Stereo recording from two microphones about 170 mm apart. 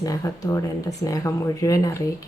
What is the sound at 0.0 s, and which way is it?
A woman's voice, 20° left (ahead or behind).